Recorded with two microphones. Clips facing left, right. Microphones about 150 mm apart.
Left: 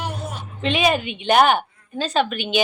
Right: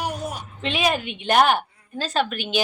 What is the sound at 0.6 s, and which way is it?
A woman's voice, centre (ahead or behind).